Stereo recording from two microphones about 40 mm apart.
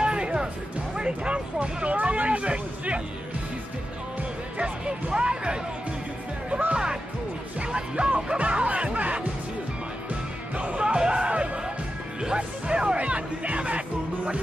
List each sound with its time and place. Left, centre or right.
0.0 s music: right
0.9 s a sound: right
5.1 s basketball bounce: right
6.7 s music: centre; by 9.3 s right
10.5 s music: right
10.8 s music: right